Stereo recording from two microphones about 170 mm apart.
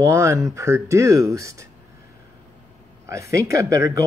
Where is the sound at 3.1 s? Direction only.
15° right (ahead or behind).